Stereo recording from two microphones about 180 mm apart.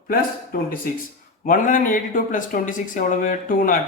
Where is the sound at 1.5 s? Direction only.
45° left (ahead or behind).